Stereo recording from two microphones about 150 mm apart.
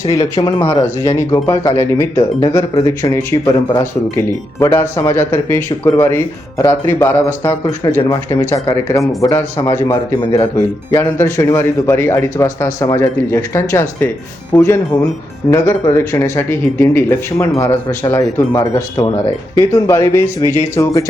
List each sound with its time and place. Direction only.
0.1 s speech: 25° left (ahead or behind)